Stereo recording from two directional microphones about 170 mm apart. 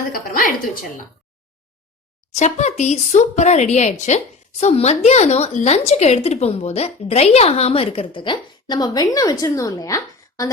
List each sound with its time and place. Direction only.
0.1 s a woman's voice: 55° left (ahead or behind)
2.3 s speech: 45° left (ahead or behind); by 10.5 s 20° left (ahead or behind)